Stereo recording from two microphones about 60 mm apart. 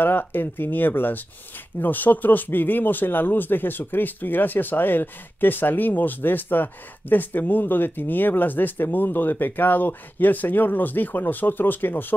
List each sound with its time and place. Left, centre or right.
0.0 s speech: left